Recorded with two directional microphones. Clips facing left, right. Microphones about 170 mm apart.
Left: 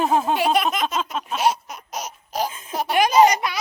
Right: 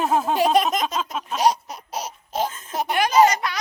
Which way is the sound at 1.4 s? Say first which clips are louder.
Right 2 dB; 35° right (ahead or behind).